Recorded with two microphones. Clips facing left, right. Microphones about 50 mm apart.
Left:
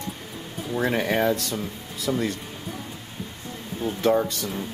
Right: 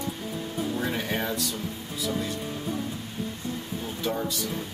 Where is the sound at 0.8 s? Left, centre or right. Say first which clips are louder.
Left 10 dB; left.